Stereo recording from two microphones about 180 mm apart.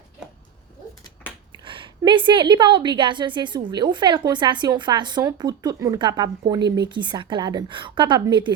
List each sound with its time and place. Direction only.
1.6 s a woman's voice: 25° right (ahead or behind)